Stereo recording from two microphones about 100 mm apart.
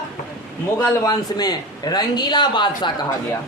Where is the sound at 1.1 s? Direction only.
45° left (ahead or behind).